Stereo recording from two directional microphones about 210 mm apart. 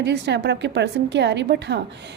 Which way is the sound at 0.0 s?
55° right (ahead or behind).